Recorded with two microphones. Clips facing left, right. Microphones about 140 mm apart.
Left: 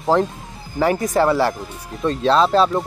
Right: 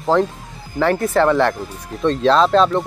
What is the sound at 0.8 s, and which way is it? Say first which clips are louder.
Speech: right 1 dB; 10° left (ahead or behind).